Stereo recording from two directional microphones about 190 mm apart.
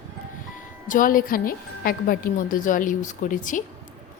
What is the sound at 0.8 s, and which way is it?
A woman's voice, 45° left (ahead or behind).